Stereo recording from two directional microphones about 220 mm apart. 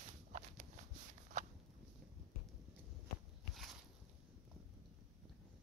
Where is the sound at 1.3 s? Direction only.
35° right (ahead or behind).